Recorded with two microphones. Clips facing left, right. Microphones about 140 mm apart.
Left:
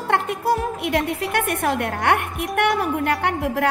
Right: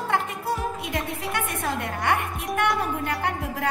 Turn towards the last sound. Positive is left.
turn(degrees=70)  # may be behind; listen again after turning